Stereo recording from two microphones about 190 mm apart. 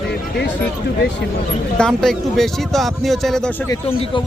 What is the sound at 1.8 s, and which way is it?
Speech, centre (ahead or behind).